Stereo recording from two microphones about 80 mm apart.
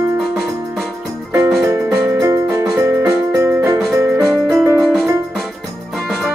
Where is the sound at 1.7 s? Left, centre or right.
Right.